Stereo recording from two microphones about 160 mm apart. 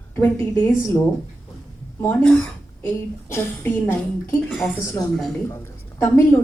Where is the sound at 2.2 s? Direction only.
5° left (ahead or behind).